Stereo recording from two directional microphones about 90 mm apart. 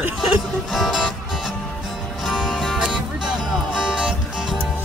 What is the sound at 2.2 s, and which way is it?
Music, 5° right (ahead or behind).